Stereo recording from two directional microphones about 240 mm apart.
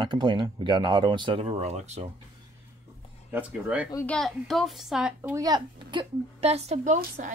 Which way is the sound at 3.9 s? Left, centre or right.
Centre.